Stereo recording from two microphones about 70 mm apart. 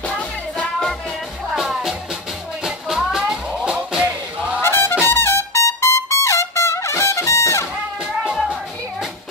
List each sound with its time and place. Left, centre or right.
0.1 s music: centre
1.5 s music: centre
3.6 s music: centre
4.6 s music: left
5.0 s trumpet: left
8.2 s music: centre